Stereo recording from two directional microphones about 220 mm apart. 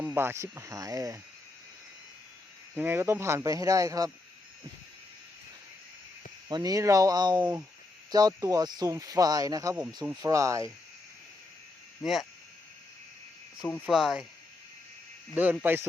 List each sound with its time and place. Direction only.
0.0 s speech: 10° right (ahead or behind)
2.7 s speech: 10° right (ahead or behind)
6.5 s speech: 15° right (ahead or behind)
13.6 s speech: centre (ahead or behind)
15.6 s speech: 10° right (ahead or behind)